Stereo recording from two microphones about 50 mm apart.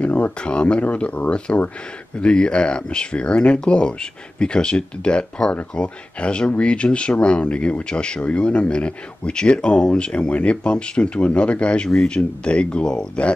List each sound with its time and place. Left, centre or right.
0.0 s speech: left
2.1 s speech: centre